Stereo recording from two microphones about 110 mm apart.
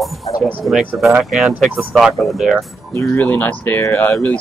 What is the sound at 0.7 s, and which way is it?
Speech, 5° right (ahead or behind).